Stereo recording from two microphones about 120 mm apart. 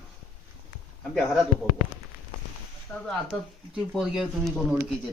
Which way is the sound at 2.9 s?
20° left (ahead or behind).